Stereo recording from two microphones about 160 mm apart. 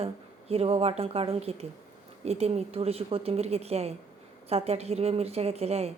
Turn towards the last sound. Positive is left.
turn(degrees=-40)  # may be behind; listen again after turning